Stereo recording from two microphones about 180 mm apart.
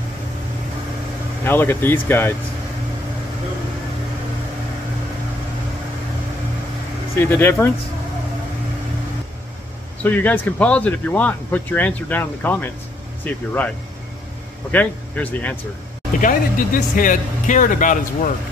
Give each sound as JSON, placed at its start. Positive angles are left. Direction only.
{"t": 1.4, "sound": "speech", "side_deg": 10}
{"t": 7.2, "sound": "speech", "side_deg": 10}
{"t": 10.0, "sound": "speech", "side_deg": 10}
{"t": 14.7, "sound": "speech", "side_deg": 10}
{"t": 16.2, "sound": "speech", "side_deg": 50}